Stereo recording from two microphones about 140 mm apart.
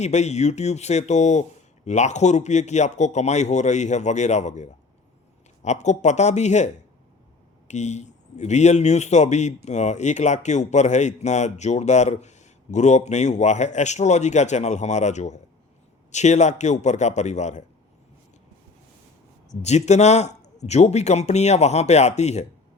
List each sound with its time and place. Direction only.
0.0 s a man's voice: 55° left (ahead or behind)
7.7 s a man's voice: 55° left (ahead or behind)
19.5 s speech: 55° left (ahead or behind)